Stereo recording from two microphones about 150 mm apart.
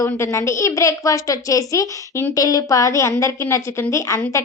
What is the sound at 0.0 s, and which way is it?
A woman's voice, 20° left (ahead or behind).